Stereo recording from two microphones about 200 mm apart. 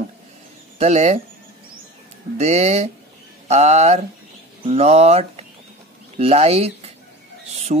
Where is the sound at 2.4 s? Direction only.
35° right (ahead or behind).